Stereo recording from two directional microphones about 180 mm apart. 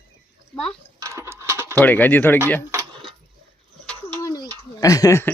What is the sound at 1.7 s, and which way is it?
Speech, 10° left (ahead or behind).